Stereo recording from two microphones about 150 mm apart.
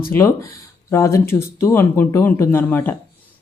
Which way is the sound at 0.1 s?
20° left (ahead or behind).